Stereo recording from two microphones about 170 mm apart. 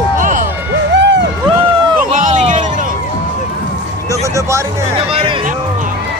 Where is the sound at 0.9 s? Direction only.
90° right.